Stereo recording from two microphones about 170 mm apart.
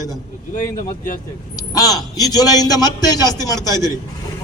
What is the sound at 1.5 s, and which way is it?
Speech, 20° left (ahead or behind).